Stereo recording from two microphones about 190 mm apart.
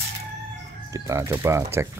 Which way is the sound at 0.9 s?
15° right (ahead or behind).